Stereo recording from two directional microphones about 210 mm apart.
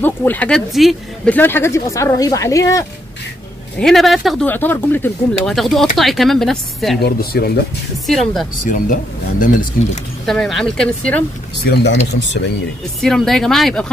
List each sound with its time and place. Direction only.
0.0 s speech: 10° left (ahead or behind)
3.7 s speech: centre (ahead or behind)
7.0 s speech: 50° left (ahead or behind)
8.1 s speech: centre (ahead or behind)
8.6 s speech: 40° left (ahead or behind)
10.2 s speech: centre (ahead or behind)
11.7 s speech: 55° left (ahead or behind)
13.0 s speech: centre (ahead or behind)